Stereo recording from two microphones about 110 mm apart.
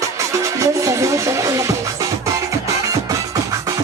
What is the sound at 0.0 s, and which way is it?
Music, 30° right (ahead or behind).